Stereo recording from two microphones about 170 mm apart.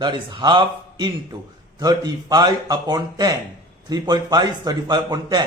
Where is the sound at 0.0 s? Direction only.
25° right (ahead or behind).